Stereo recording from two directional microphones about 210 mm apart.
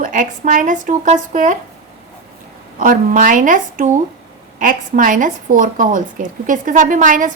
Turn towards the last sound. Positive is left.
turn(degrees=-40)  # may be behind; listen again after turning